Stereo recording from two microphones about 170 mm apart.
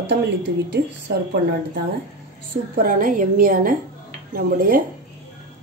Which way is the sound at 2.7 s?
60° right (ahead or behind).